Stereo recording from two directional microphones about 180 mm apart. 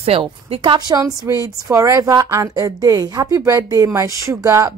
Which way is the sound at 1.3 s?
15° right (ahead or behind).